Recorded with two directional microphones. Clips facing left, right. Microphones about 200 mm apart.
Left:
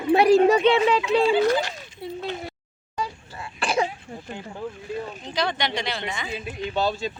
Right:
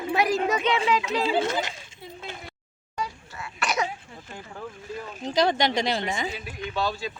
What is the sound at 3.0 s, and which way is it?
Cough, 30° left (ahead or behind).